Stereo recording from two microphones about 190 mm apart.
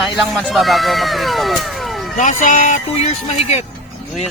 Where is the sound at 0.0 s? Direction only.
Centre (ahead or behind).